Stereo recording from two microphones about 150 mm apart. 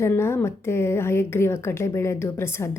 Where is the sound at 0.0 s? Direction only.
15° left (ahead or behind).